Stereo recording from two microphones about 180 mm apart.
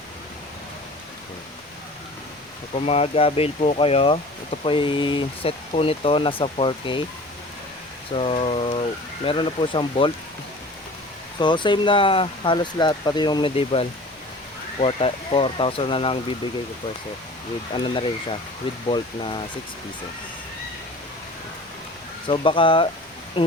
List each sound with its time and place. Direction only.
2.7 s speech: 35° left (ahead or behind)
8.1 s speech: 30° left (ahead or behind)
11.3 s speech: 25° left (ahead or behind)
17.7 s speech: 25° left (ahead or behind)
22.3 s speech: 30° left (ahead or behind)